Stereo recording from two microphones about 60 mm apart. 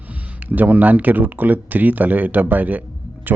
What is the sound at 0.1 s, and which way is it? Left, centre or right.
Speech, right.